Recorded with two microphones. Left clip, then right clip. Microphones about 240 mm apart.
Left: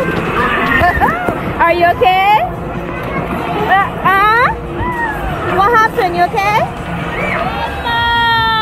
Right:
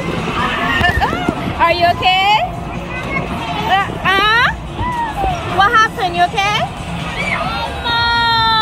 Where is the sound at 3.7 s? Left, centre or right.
Right.